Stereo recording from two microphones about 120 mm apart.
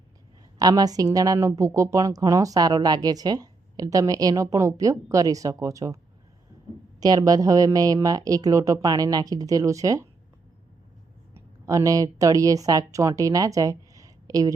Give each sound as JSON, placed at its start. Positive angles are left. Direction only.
{"t": 0.6, "sound": "a woman's voice", "side_deg": -30}
{"t": 7.0, "sound": "a woman's voice", "side_deg": -35}
{"t": 11.3, "sound": "a woman's voice", "side_deg": -25}